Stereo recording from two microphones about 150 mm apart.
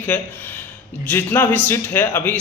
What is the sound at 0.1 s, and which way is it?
A man's voice, 10° left (ahead or behind).